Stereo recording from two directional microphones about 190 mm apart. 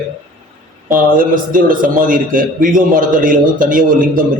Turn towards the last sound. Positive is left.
turn(degrees=-45)  # may be behind; listen again after turning